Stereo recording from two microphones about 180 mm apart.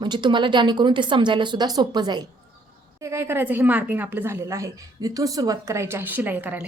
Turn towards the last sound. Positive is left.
turn(degrees=-10)  # may be behind; listen again after turning